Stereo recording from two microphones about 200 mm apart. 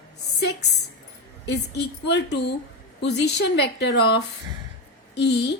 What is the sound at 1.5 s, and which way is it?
Speech, 55° left (ahead or behind).